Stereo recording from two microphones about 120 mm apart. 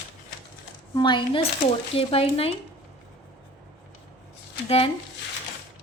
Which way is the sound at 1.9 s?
50° left (ahead or behind).